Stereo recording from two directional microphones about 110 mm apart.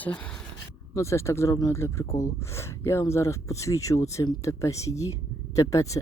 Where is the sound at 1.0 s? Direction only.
25° left (ahead or behind).